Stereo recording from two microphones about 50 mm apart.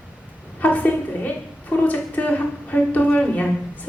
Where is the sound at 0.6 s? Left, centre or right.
Left.